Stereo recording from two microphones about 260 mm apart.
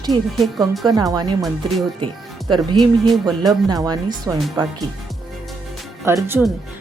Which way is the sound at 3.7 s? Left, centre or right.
Centre.